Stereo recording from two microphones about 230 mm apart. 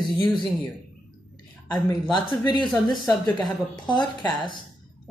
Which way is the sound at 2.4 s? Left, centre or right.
Centre.